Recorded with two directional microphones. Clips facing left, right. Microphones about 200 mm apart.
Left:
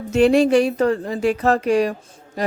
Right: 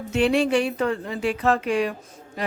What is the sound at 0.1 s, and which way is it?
Speech, 45° left (ahead or behind).